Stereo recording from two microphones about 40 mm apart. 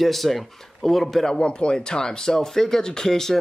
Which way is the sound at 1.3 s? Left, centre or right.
Left.